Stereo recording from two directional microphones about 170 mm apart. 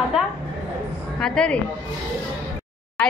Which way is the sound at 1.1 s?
5° left (ahead or behind).